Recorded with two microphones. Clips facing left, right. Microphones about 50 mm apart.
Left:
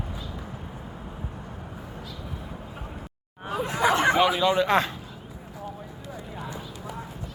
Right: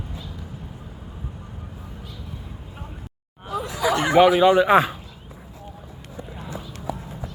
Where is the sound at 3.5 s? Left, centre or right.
Left.